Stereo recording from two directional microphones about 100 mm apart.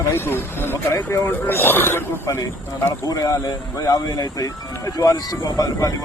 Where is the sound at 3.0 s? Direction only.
35° left (ahead or behind).